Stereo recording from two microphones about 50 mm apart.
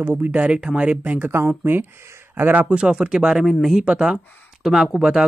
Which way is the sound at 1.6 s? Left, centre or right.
Right.